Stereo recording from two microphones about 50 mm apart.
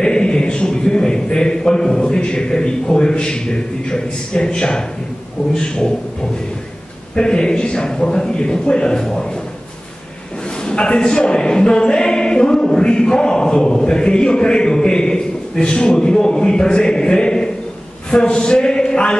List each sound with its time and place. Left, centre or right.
0.0 s a man's voice: centre
7.2 s a man's voice: centre
10.6 s a man's voice: centre